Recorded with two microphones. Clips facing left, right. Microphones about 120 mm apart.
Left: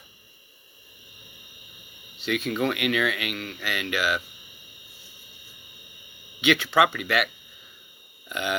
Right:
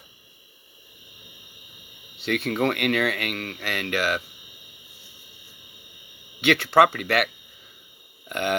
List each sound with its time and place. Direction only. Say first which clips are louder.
2.1 s speech: right 2 dB; 65° right (ahead or behind)
6.4 s speech: right 3 dB; 65° right (ahead or behind)
8.3 s a sound: right 3 dB; 60° right (ahead or behind)